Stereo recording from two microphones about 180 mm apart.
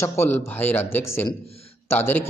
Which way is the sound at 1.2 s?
35° left (ahead or behind).